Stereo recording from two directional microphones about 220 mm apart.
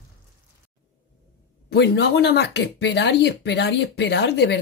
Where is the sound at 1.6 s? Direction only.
50° left (ahead or behind).